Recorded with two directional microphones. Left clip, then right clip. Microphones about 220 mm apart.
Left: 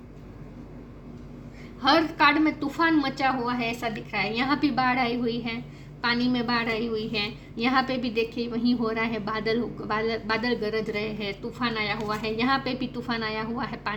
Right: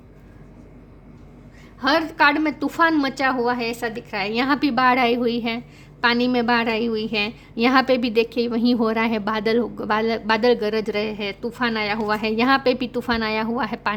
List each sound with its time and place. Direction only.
1.8 s a woman's voice: 50° right (ahead or behind)